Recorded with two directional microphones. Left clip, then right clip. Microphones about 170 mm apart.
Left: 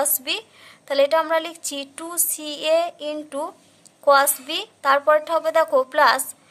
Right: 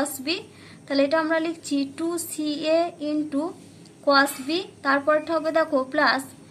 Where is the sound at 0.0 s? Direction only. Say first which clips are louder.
Left 3 dB; 45° left (ahead or behind).